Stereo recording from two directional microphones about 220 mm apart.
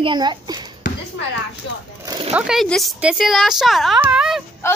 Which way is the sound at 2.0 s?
20° right (ahead or behind).